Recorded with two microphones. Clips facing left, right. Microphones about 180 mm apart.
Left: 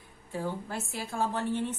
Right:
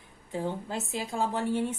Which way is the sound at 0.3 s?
20° right (ahead or behind).